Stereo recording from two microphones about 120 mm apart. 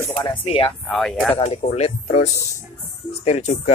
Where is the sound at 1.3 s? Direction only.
65° left (ahead or behind).